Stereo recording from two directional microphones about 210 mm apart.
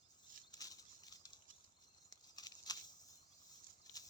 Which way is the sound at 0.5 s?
15° left (ahead or behind).